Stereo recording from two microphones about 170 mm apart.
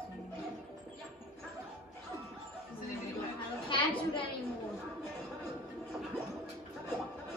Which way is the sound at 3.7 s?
30° left (ahead or behind).